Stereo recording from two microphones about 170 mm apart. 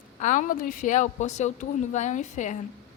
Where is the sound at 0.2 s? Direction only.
50° left (ahead or behind).